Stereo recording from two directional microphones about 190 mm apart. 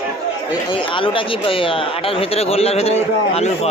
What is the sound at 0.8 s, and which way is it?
Speech, 25° left (ahead or behind).